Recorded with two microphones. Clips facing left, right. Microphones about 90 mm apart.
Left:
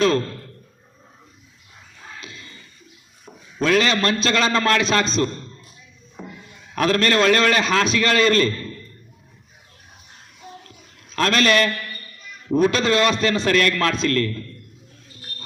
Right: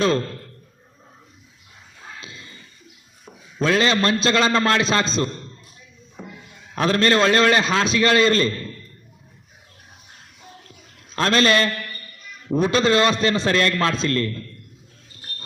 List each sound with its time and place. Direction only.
2.2 s a sound: 25° right (ahead or behind)
3.6 s a man's voice: 30° right (ahead or behind)
6.7 s a man's voice: 25° right (ahead or behind)
11.1 s a man's voice: 30° right (ahead or behind)